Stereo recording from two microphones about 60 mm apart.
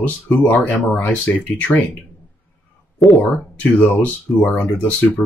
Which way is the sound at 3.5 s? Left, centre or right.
Left.